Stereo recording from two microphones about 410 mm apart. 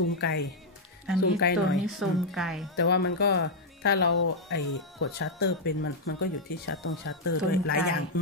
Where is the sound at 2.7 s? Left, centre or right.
Left.